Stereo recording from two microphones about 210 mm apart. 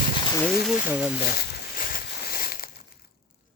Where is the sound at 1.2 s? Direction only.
45° left (ahead or behind).